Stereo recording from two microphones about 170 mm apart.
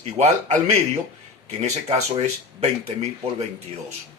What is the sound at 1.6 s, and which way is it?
Speech, 40° right (ahead or behind).